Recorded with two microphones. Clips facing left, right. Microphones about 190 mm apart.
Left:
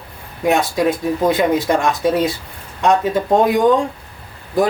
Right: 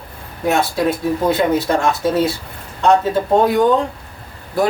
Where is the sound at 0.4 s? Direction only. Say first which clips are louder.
Left 1 dB; 15° left (ahead or behind).